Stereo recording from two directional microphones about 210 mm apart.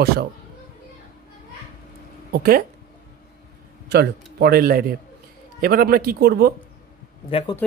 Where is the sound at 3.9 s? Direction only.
50° right (ahead or behind).